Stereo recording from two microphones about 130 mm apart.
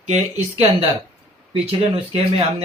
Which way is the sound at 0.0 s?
55° right (ahead or behind).